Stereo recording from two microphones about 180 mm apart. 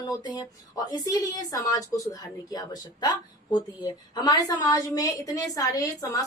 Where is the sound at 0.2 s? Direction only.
25° left (ahead or behind).